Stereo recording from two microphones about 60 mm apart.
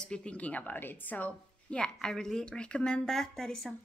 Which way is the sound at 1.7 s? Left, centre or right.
Centre.